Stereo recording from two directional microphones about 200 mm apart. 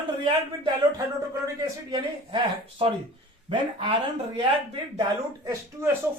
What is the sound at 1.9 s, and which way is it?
Speech, 25° right (ahead or behind).